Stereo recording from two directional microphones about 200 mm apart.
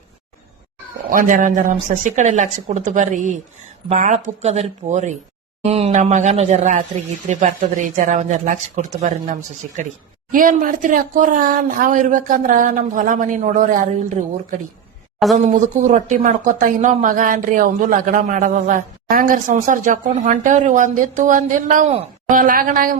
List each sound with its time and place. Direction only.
1.1 s a woman's voice: 40° right (ahead or behind)